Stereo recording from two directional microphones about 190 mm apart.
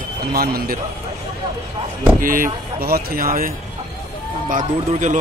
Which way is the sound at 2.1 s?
45° right (ahead or behind).